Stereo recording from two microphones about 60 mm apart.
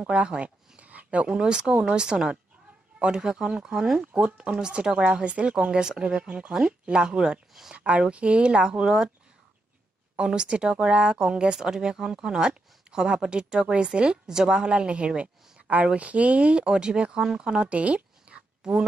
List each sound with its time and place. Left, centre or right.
0.0 s speech: centre
4.1 s speech: centre
7.7 s speech: right
10.1 s speech: centre